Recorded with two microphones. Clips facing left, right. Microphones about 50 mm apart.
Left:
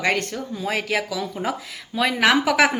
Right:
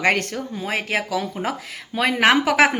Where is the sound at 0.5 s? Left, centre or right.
Right.